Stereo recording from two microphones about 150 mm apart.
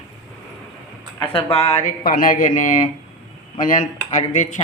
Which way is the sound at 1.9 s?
70° left (ahead or behind).